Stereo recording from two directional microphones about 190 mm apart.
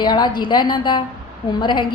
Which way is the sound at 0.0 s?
20° left (ahead or behind).